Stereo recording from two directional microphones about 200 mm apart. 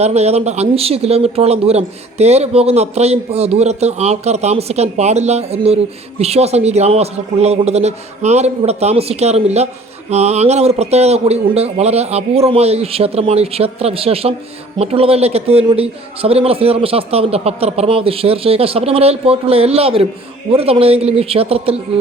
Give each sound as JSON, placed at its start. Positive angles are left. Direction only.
{"t": 0.0, "sound": "a man's voice", "side_deg": -30}